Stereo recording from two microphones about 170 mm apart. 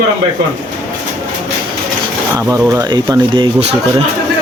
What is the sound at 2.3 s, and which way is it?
Speech, 20° right (ahead or behind).